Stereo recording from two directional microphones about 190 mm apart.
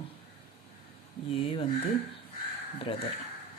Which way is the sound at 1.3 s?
30° left (ahead or behind).